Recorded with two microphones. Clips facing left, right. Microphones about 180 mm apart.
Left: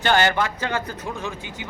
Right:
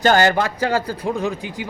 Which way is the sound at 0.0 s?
40° right (ahead or behind).